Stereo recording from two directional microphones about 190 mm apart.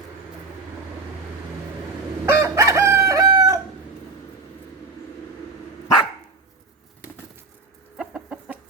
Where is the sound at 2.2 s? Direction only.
15° right (ahead or behind).